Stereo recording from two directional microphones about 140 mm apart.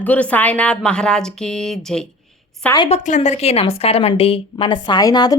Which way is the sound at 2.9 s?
55° left (ahead or behind).